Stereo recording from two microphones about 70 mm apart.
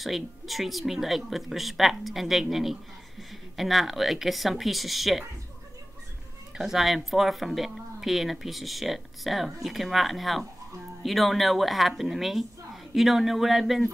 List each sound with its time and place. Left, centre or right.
0.0 s speech: centre
6.6 s speech: centre